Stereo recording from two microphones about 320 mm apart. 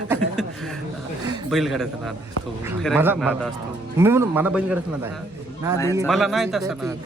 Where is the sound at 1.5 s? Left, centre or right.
Centre.